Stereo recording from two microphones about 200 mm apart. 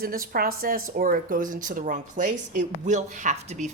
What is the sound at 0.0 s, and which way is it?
A woman's voice, 45° right (ahead or behind).